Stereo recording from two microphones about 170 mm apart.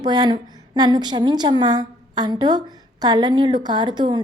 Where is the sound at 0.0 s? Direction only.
25° right (ahead or behind).